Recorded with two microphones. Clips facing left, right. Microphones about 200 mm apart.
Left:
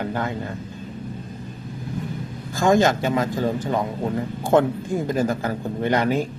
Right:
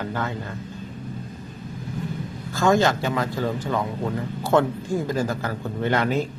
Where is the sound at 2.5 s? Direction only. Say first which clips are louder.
Left 2 dB; 15° left (ahead or behind).